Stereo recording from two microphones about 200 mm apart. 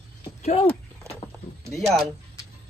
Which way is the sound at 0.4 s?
30° left (ahead or behind).